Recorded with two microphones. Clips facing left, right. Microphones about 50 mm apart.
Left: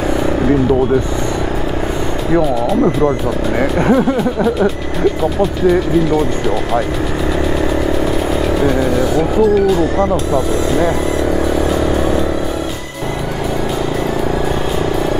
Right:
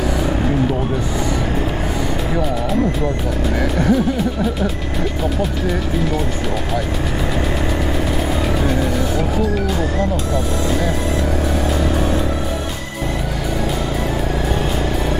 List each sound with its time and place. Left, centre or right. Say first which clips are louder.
3.5 s music: left 4 dB; left